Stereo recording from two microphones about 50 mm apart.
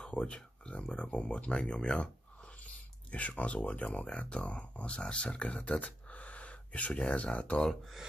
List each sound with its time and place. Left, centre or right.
0.0 s speech: centre